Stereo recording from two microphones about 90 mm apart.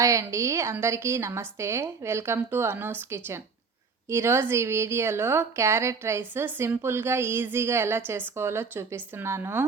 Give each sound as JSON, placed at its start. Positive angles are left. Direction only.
{"t": 0.0, "sound": "speech", "side_deg": -35}